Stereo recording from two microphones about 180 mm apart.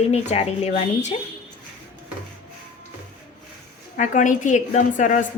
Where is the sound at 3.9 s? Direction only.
45° left (ahead or behind).